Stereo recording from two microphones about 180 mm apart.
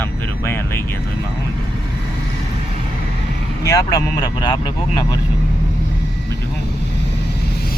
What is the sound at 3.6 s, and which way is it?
Speech, 20° left (ahead or behind).